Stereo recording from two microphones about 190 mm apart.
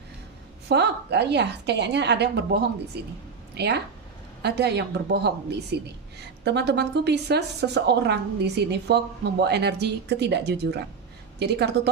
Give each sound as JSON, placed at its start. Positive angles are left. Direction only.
{"t": 0.7, "sound": "a woman's voice", "side_deg": -60}
{"t": 3.5, "sound": "a woman's voice", "side_deg": -60}